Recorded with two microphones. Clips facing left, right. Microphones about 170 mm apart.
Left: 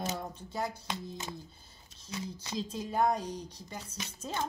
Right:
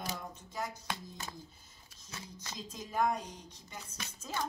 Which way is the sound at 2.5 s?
30° left (ahead or behind).